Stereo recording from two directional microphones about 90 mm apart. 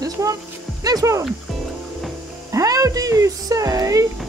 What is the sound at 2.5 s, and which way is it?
Speech, 40° right (ahead or behind).